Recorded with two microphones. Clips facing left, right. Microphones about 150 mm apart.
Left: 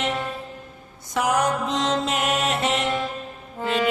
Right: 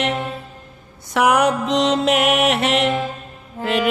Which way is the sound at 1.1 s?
70° right (ahead or behind).